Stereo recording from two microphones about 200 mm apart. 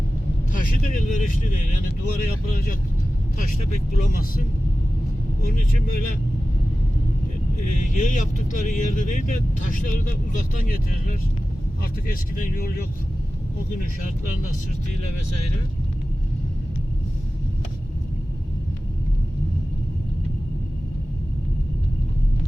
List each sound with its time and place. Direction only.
0.5 s speech: 40° left (ahead or behind)
7.6 s speech: 40° left (ahead or behind)